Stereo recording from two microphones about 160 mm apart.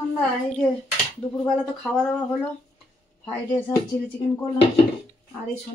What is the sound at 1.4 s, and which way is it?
Speech, centre (ahead or behind).